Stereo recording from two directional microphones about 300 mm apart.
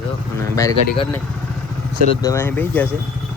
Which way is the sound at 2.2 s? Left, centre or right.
Centre.